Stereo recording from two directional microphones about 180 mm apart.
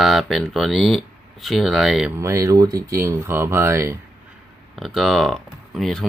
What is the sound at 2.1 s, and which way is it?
Speech, 15° right (ahead or behind).